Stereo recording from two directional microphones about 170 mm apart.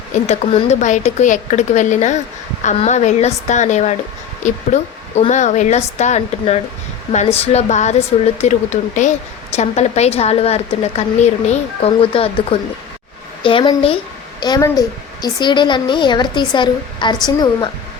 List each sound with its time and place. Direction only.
0.3 s a woman's voice: 40° left (ahead or behind); by 17.7 s 25° left (ahead or behind)